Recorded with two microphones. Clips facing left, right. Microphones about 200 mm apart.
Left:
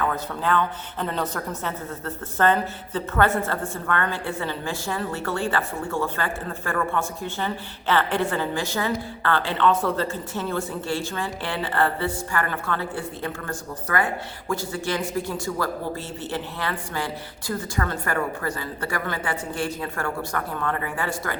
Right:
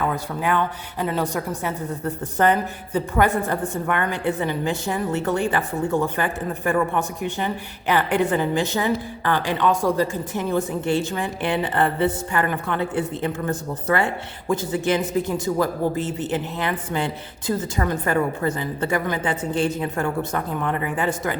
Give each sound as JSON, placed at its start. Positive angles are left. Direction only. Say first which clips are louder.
{"t": 0.0, "sound": "a woman's voice", "louder": "right 2 dB", "side_deg": -15}